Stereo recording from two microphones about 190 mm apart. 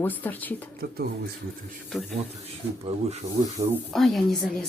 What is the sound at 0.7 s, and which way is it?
Speech, 55° right (ahead or behind).